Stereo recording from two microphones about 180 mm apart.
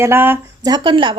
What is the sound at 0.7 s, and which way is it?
Speech, 25° right (ahead or behind).